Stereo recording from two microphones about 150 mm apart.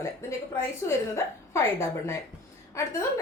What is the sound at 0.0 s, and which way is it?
A woman's voice, 20° left (ahead or behind).